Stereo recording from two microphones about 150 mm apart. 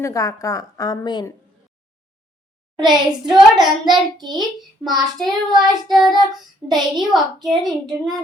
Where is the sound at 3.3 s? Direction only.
Centre (ahead or behind).